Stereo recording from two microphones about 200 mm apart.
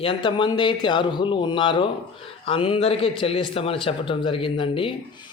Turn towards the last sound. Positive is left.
turn(degrees=25)  # may be behind; listen again after turning